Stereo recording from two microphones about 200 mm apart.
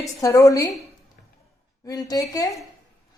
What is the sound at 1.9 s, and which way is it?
Speech, 20° left (ahead or behind).